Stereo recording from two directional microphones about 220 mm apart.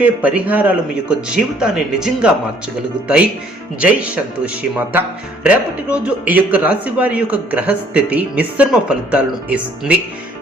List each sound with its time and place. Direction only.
0.0 s a man's voice: 5° right (ahead or behind)
3.8 s speech: 5° right (ahead or behind)